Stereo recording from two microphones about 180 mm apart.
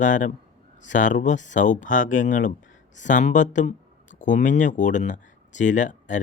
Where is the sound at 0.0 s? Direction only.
45° left (ahead or behind).